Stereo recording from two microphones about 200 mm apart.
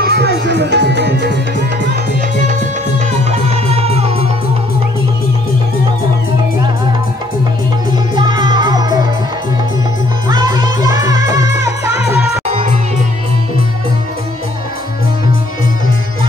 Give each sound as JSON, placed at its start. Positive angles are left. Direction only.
{"t": 0.0, "sound": "tabla", "side_deg": -55}
{"t": 3.3, "sound": "music", "side_deg": -30}
{"t": 8.2, "sound": "music", "side_deg": -20}
{"t": 10.2, "sound": "music", "side_deg": -20}
{"t": 12.4, "sound": "music", "side_deg": -35}